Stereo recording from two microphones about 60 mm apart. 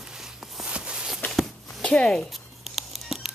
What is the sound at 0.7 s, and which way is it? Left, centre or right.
Walk, centre.